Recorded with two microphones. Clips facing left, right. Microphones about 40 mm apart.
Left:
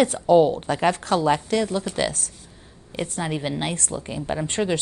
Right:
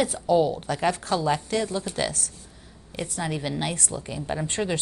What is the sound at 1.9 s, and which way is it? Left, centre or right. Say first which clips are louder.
Speech: left 3 dB; left.